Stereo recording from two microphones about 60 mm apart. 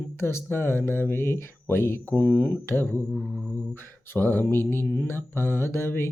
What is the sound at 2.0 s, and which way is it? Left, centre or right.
Speech, left.